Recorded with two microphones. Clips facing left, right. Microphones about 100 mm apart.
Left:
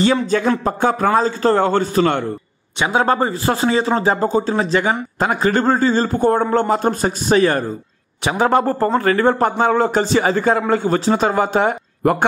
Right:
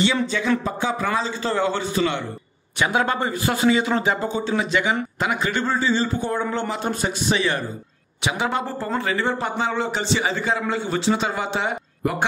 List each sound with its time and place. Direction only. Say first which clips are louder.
0.0 s speech: left 6 dB; 45° left (ahead or behind)
2.8 s speech: left 5 dB; 30° left (ahead or behind); by 12.3 s 55° left (ahead or behind)